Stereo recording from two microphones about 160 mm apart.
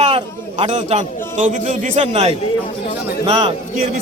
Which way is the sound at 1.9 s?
40° right (ahead or behind).